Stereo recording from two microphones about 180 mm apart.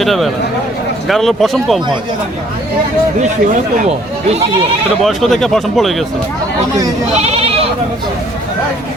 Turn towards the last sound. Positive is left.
turn(degrees=-35)  # may be behind; listen again after turning